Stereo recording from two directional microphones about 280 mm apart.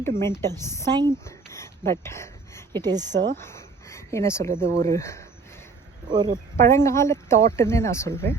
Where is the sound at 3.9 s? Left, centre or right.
Centre.